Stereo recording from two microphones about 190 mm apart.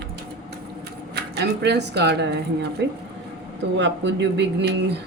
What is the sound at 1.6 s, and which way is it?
Speech, 60° right (ahead or behind).